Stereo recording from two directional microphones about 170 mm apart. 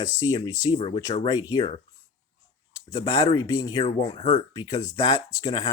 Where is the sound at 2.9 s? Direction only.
25° left (ahead or behind).